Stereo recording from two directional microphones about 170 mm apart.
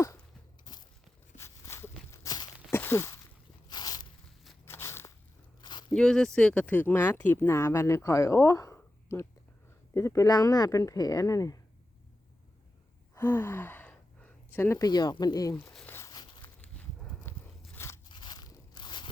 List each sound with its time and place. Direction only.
1.4 s a sound: 15° left (ahead or behind)
4.6 s crunch: 15° left (ahead or behind)
5.6 s a sound: 25° left (ahead or behind)
5.9 s speech: 5° left (ahead or behind); by 11.5 s 20° left (ahead or behind)
13.1 s sigh: 15° left (ahead or behind)
14.8 s speech: 25° left (ahead or behind)
15.6 s crumpling: centre (ahead or behind)
15.9 s a sound: 20° left (ahead or behind)
16.6 s livestock: 5° left (ahead or behind)
17.7 s scissors: 15° left (ahead or behind)
18.1 s crunch: 25° left (ahead or behind)